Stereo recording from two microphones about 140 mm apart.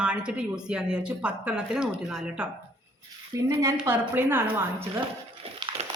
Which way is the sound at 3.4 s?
25° right (ahead or behind).